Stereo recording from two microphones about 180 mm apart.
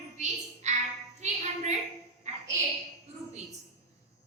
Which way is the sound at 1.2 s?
40° right (ahead or behind).